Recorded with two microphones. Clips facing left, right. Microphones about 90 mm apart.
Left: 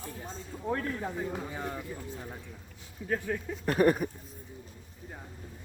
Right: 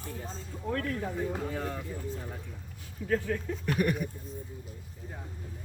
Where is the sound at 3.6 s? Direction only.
35° left (ahead or behind).